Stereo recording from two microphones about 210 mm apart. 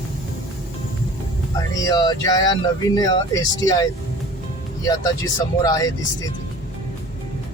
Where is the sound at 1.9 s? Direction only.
15° left (ahead or behind).